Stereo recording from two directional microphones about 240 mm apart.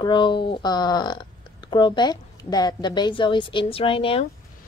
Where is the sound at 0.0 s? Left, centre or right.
Centre.